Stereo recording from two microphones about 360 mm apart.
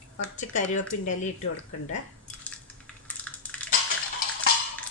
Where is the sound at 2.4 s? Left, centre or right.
Centre.